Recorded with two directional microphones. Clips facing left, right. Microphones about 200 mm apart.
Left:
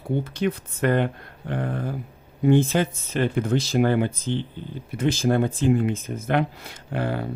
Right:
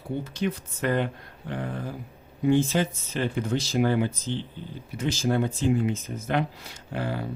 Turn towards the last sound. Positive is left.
turn(degrees=55)  # may be behind; listen again after turning